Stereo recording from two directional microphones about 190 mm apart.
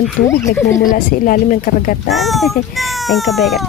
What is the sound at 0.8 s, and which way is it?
Speech, 45° left (ahead or behind).